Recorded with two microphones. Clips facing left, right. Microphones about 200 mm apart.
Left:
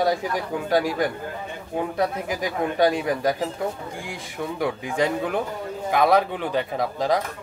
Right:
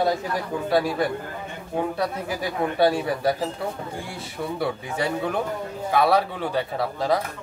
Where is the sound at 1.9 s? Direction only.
15° left (ahead or behind).